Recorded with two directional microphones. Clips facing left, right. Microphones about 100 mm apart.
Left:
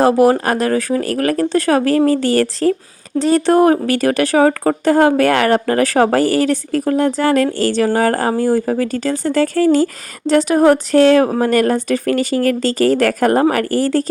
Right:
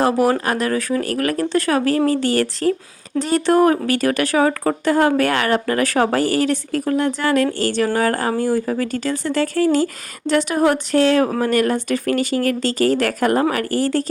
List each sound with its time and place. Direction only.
0.0 s speech: 35° left (ahead or behind)